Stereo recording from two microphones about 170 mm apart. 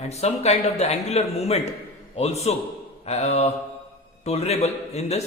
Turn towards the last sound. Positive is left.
turn(degrees=40)  # may be behind; listen again after turning